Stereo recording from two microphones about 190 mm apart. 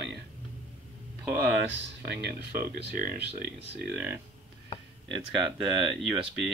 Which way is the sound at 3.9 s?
5° right (ahead or behind).